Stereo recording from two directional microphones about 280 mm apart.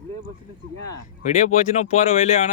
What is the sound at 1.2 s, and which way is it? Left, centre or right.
Speech, left.